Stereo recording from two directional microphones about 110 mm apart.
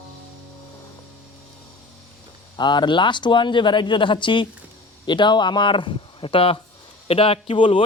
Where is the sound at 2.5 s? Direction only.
45° left (ahead or behind).